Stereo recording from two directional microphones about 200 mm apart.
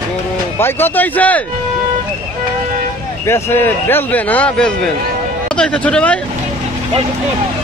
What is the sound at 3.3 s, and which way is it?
A man's voice, 15° left (ahead or behind).